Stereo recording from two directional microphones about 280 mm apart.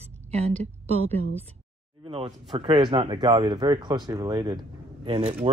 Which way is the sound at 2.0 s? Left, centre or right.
Centre.